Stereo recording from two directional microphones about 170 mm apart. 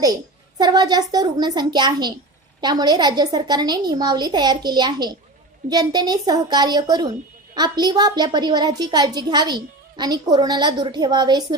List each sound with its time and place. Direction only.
0.6 s a woman's voice: 25° right (ahead or behind)